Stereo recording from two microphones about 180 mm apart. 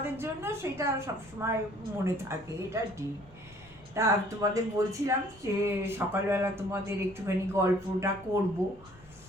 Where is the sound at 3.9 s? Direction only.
15° right (ahead or behind).